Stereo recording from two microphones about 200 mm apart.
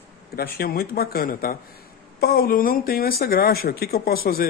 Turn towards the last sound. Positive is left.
turn(degrees=50)  # may be behind; listen again after turning